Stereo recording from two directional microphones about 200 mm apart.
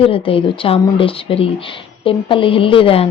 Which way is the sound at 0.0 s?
25° left (ahead or behind).